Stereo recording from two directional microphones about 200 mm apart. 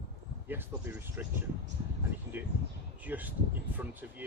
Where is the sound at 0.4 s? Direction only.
10° right (ahead or behind).